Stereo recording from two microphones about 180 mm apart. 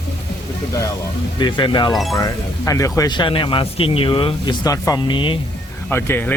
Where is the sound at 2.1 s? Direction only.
20° left (ahead or behind).